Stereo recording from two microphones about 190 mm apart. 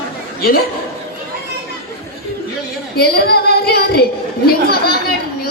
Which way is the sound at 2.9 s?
55° left (ahead or behind).